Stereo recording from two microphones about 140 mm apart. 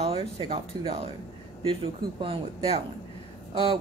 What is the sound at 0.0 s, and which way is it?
Speech, 45° right (ahead or behind).